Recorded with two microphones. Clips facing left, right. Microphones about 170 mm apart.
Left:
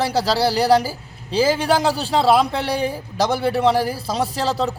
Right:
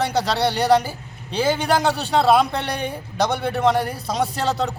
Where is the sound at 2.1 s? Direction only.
Centre (ahead or behind).